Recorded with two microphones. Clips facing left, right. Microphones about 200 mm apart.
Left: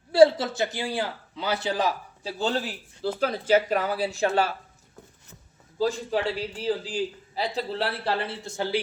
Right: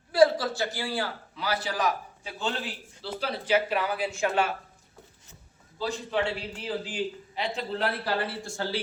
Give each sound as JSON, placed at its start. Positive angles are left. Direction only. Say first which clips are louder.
{"t": 0.1, "sound": "a man's voice", "louder": "left 4 dB", "side_deg": 25}
{"t": 5.8, "sound": "a man's voice", "louder": "left 4 dB", "side_deg": 35}